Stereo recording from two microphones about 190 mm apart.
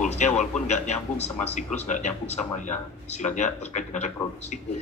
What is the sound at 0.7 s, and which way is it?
A man's voice, 35° left (ahead or behind).